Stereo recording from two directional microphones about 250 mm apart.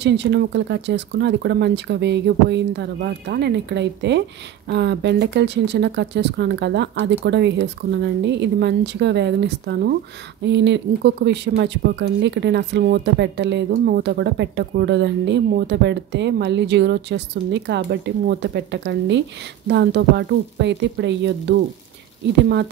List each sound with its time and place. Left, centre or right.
0.0 s speech: right